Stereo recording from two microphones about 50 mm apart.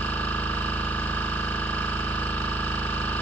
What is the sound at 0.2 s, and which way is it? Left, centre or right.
Effects unit, left.